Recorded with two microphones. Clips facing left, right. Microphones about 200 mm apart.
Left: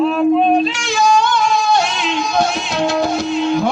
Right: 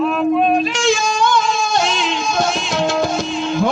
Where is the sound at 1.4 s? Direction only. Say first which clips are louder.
Left 3 dB; 60° left (ahead or behind).